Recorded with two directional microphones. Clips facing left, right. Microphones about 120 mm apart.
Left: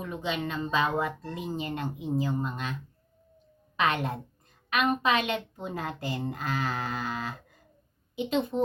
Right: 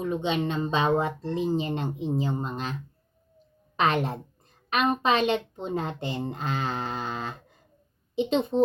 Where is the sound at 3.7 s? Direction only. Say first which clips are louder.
Right 3 dB; 35° right (ahead or behind).